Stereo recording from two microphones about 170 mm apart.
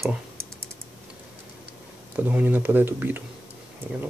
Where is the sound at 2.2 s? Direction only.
10° right (ahead or behind).